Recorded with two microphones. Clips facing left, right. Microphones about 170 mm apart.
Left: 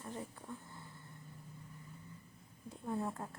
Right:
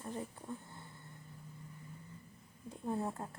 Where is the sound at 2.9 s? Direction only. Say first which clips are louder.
Right 1 dB; 20° right (ahead or behind).